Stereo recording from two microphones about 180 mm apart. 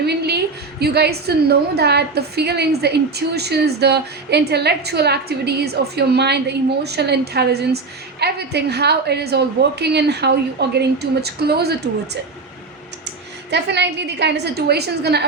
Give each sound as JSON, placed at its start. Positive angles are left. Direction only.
{"t": 0.0, "sound": "a woman's voice", "side_deg": -65}
{"t": 13.5, "sound": "a woman's voice", "side_deg": -70}